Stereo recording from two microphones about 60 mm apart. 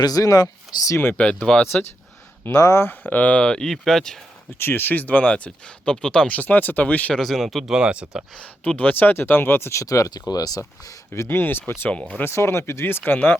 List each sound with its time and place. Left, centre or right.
0.0 s speech: left
1.1 s speech: left
2.5 s speech: left
2.9 s speech: left; by 4.2 s centre
4.5 s speech: left; by 6.2 s centre
6.2 s speech: left
7.1 s speech: centre
7.7 s speech: centre
8.6 s speech: left
9.8 s speech: left
10.6 s speech: left